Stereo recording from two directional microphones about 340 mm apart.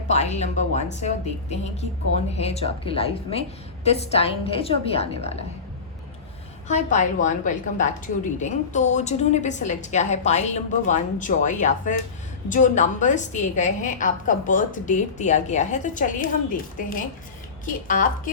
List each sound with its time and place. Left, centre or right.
0.1 s a woman's voice: centre
6.7 s a woman's voice: left